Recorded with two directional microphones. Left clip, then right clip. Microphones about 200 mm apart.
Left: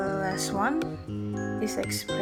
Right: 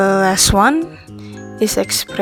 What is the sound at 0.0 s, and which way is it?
Music, 45° right (ahead or behind).